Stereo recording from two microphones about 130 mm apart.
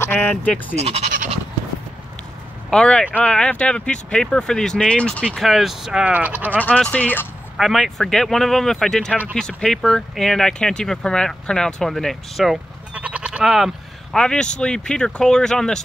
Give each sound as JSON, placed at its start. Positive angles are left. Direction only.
{"t": 0.0, "sound": "bleat", "side_deg": 15}
{"t": 0.7, "sound": "speech", "side_deg": -55}
{"t": 2.7, "sound": "speech", "side_deg": 5}
{"t": 6.6, "sound": "speech", "side_deg": 10}
{"t": 7.5, "sound": "speech", "side_deg": 0}